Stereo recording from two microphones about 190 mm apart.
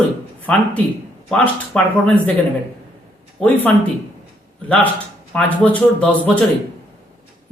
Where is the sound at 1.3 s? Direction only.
10° left (ahead or behind).